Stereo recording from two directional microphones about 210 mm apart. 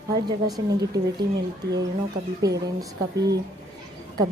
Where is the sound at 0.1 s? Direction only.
20° right (ahead or behind).